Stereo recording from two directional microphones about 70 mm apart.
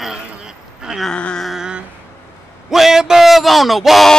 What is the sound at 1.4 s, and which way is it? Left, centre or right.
Speech, centre.